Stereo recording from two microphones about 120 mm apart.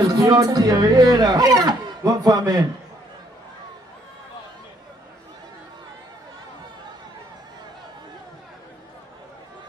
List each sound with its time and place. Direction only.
0.0 s speech: 30° right (ahead or behind)